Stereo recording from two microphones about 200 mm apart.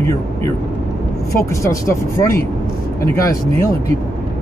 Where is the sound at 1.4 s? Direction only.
15° left (ahead or behind).